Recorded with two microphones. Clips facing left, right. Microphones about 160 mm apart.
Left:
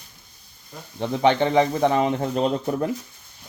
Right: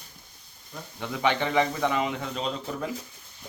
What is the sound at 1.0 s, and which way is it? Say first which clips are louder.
Speech: left 7 dB; 35° left (ahead or behind).